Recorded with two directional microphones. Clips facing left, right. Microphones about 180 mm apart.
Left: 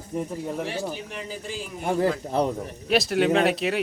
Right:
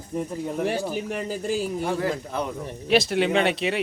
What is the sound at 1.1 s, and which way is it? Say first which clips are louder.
Speech: right 7 dB; 45° right (ahead or behind).